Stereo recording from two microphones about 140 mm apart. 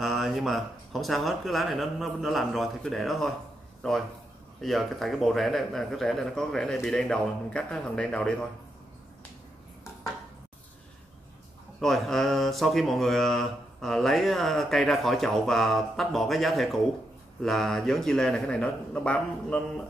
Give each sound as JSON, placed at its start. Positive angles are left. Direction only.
{"t": 0.0, "sound": "mantra", "side_deg": 0}
{"t": 4.6, "sound": "mantra", "side_deg": 0}
{"t": 11.8, "sound": "mantra", "side_deg": 0}